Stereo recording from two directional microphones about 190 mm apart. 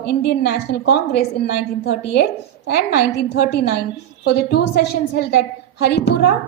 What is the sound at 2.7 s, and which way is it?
A woman's voice, 55° left (ahead or behind).